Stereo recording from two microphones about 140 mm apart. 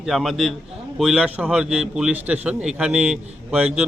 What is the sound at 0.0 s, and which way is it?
A man's voice, centre (ahead or behind).